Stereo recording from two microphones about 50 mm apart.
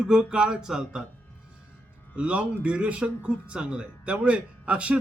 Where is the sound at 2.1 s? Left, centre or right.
Right.